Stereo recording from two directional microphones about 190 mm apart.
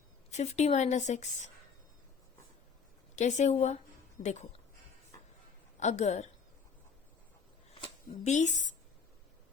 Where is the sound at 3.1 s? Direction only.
40° left (ahead or behind).